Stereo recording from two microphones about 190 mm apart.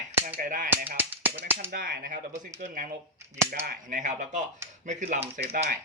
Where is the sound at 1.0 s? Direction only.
10° right (ahead or behind).